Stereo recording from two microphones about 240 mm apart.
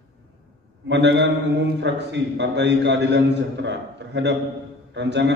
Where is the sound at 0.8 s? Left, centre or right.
Right.